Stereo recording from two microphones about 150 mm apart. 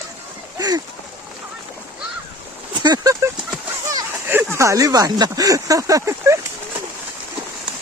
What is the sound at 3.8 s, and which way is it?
Speech, 15° right (ahead or behind).